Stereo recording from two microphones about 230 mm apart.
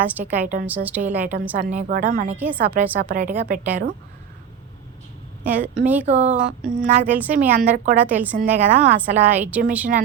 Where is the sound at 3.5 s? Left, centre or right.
Right.